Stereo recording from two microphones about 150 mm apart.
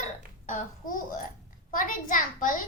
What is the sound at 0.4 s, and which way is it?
A child's voice, 60° left (ahead or behind).